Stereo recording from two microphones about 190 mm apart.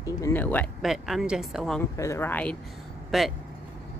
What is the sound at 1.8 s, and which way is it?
Speech, 15° left (ahead or behind).